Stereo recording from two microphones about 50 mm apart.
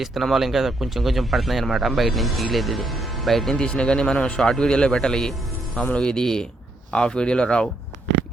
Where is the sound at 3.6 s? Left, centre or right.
Centre.